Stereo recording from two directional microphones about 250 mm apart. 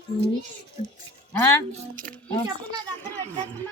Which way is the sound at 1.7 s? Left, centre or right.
Right.